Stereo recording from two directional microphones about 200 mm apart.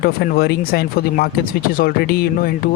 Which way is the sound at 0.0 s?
50° left (ahead or behind).